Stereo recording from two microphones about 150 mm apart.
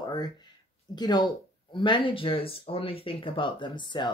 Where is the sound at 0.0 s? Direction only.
25° left (ahead or behind).